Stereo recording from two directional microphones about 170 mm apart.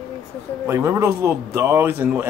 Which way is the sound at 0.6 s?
15° right (ahead or behind).